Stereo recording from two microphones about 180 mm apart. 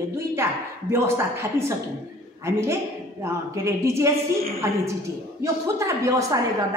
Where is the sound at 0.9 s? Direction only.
15° right (ahead or behind).